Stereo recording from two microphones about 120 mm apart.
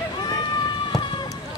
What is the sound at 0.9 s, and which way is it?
Run, 40° left (ahead or behind).